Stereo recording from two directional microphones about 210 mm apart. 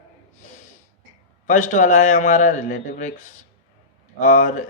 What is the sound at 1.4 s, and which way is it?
Speech, 35° left (ahead or behind).